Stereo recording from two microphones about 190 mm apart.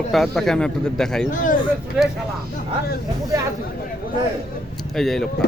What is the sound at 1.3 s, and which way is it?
Speech, 45° left (ahead or behind).